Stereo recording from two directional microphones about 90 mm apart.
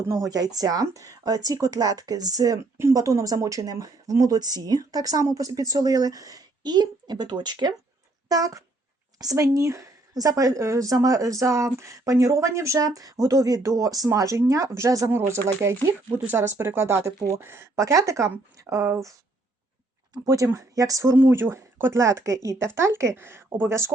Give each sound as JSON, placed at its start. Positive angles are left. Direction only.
{"t": 0.1, "sound": "speech", "side_deg": -40}
{"t": 8.3, "sound": "speech", "side_deg": -40}
{"t": 20.2, "sound": "speech", "side_deg": -35}
{"t": 21.2, "sound": "speech", "side_deg": -25}